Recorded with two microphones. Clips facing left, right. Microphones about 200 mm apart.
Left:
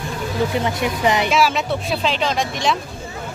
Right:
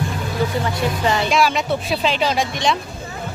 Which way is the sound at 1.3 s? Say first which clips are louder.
Even; centre (ahead or behind).